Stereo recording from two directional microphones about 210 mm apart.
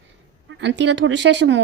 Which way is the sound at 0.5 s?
60° right (ahead or behind).